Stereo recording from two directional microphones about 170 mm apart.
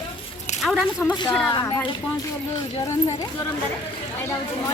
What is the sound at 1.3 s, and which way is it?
Speech, 10° left (ahead or behind).